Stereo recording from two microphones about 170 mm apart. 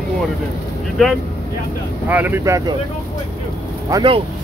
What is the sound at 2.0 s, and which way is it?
Speech, 10° right (ahead or behind).